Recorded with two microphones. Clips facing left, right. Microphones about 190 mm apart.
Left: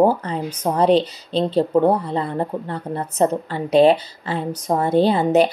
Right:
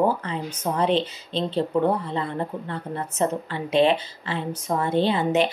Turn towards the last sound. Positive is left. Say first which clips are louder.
# left 5 dB
turn(degrees=40)  # may be behind; listen again after turning